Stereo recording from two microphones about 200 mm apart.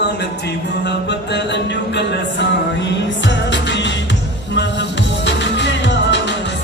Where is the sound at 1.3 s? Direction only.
60° left (ahead or behind).